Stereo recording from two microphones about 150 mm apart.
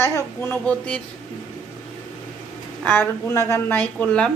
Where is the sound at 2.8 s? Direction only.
15° left (ahead or behind).